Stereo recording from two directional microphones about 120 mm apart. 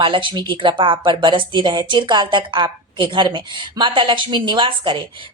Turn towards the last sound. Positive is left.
turn(degrees=-45)  # may be behind; listen again after turning